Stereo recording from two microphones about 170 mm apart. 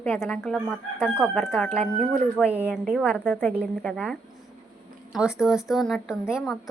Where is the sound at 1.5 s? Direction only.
15° left (ahead or behind).